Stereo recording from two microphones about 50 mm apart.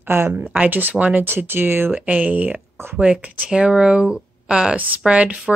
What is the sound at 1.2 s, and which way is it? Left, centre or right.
Speech, right.